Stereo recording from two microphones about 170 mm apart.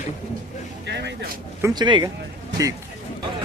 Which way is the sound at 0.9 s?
90° right.